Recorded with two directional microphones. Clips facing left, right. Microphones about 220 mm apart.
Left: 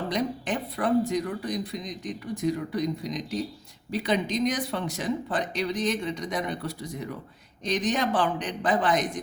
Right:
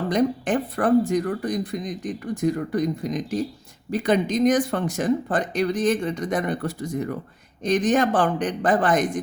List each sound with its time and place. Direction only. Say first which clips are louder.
0.1 s speech: right 9 dB; 50° right (ahead or behind)